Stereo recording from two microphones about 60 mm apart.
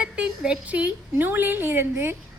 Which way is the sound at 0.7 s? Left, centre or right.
Right.